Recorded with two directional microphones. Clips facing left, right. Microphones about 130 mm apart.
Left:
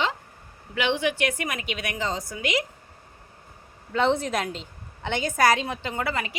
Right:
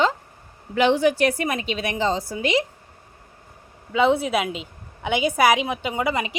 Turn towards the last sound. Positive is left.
turn(degrees=-15)  # may be behind; listen again after turning